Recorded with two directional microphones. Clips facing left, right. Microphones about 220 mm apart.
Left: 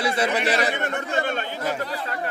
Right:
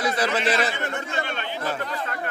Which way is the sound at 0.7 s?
55° left (ahead or behind).